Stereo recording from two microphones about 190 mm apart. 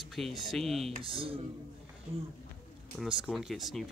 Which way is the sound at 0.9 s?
30° right (ahead or behind).